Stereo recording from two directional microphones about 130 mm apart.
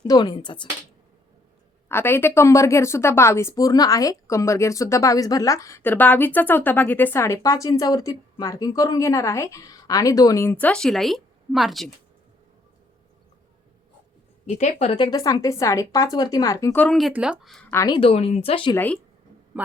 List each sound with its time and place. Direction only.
0.1 s speech: 35° left (ahead or behind)
1.9 s speech: 20° left (ahead or behind); by 11.9 s centre (ahead or behind)
14.4 s speech: 55° left (ahead or behind)
14.9 s speech: 35° left (ahead or behind)
17.1 s speech: 10° right (ahead or behind)
17.8 s speech: 40° left (ahead or behind)
19.6 s speech: 10° right (ahead or behind)